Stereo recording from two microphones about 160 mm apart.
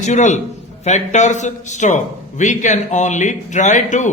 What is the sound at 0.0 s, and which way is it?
A man's voice, 45° left (ahead or behind).